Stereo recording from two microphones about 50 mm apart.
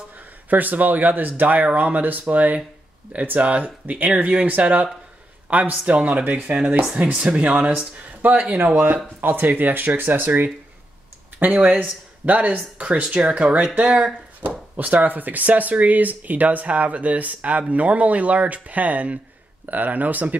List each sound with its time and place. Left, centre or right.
0.5 s speech: right
7.0 s speech: right
8.2 s speech: right
12.3 s speech: right
14.4 s speech: right